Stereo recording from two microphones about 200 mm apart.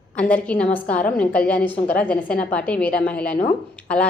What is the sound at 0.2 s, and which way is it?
A woman's voice, 5° left (ahead or behind).